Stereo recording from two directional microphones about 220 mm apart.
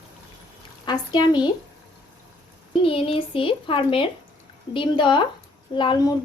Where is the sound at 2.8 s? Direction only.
25° left (ahead or behind).